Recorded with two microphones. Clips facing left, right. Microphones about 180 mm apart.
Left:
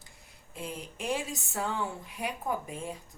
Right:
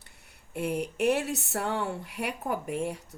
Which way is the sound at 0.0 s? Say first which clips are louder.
Left 1 dB; 65° right (ahead or behind).